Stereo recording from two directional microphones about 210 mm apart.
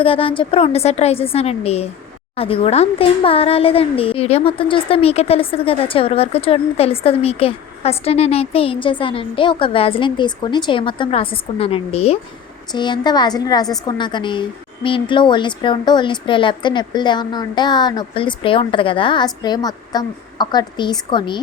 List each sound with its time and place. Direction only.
0.0 s speech: 25° left (ahead or behind)